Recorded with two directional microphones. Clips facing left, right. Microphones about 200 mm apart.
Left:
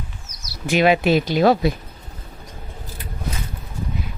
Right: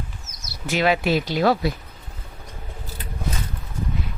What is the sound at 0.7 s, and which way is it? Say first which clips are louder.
Speech: left 4 dB; 20° left (ahead or behind).